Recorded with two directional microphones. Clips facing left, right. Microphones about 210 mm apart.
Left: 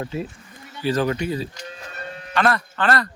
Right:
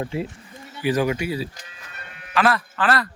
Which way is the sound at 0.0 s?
25° right (ahead or behind).